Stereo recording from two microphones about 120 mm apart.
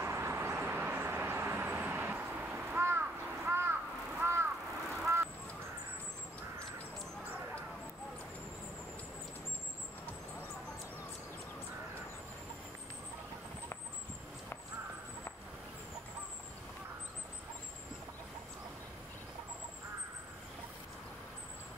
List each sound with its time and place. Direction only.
0.0 s vehicle: 20° right (ahead or behind)